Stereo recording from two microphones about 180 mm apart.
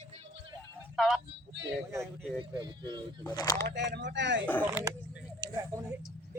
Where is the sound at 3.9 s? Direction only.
70° right (ahead or behind).